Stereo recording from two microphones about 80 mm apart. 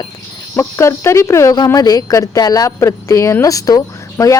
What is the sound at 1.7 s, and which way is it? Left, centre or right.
Speech, left.